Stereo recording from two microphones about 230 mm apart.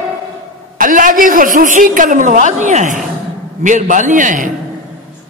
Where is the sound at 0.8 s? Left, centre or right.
Right.